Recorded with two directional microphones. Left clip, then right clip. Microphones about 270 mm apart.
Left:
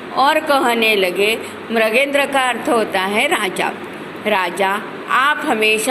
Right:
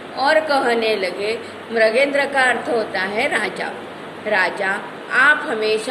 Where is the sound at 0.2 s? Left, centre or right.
Left.